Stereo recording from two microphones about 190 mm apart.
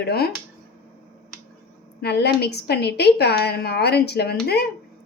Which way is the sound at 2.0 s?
60° left (ahead or behind).